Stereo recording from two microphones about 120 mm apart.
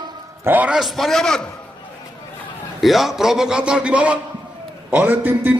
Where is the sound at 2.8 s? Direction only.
Centre (ahead or behind).